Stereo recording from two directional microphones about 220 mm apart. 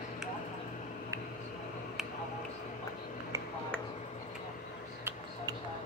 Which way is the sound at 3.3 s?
15° right (ahead or behind).